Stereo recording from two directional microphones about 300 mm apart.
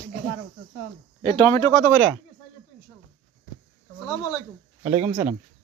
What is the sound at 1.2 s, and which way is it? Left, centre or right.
Speech, centre.